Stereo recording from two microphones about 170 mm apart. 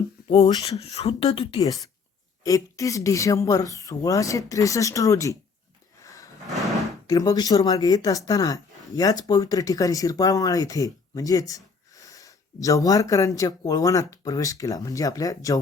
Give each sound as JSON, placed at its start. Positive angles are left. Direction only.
{"t": 0.3, "sound": "speech", "side_deg": 30}
{"t": 1.6, "sound": "speech", "side_deg": 20}
{"t": 6.5, "sound": "a sound", "side_deg": 0}
{"t": 7.1, "sound": "speech", "side_deg": 20}